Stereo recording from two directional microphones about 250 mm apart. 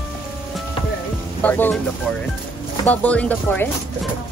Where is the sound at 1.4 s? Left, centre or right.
Centre.